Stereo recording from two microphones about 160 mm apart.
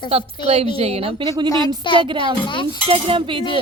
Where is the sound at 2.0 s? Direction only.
30° right (ahead or behind).